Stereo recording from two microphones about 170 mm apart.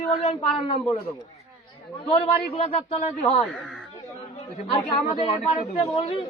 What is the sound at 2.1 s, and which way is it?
A woman's voice, 35° left (ahead or behind).